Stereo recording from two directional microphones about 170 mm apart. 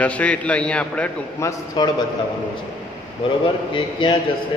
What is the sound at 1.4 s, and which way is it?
Speech, 20° left (ahead or behind).